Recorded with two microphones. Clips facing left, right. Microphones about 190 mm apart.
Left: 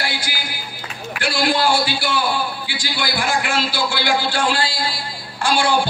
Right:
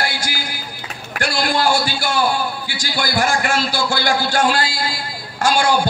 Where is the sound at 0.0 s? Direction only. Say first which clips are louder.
Right 2 dB; 45° right (ahead or behind).